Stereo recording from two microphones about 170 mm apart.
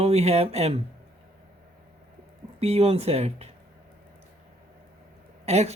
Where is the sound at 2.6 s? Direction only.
35° right (ahead or behind).